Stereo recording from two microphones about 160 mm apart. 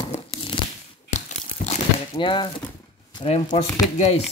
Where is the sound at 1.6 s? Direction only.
60° left (ahead or behind).